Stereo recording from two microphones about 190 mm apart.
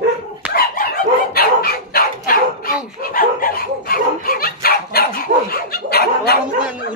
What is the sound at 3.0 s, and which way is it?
Dog, 50° left (ahead or behind).